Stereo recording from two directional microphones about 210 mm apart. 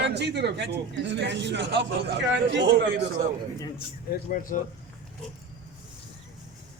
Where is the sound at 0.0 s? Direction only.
55° right (ahead or behind).